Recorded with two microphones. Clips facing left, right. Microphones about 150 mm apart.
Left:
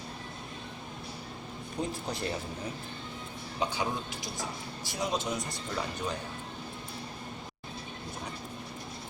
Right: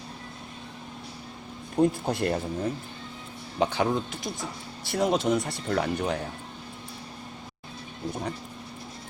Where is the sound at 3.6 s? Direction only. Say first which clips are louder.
Right 7 dB; 60° right (ahead or behind).